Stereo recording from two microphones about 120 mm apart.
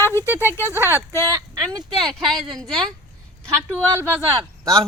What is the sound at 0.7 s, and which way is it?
Speech, 20° right (ahead or behind).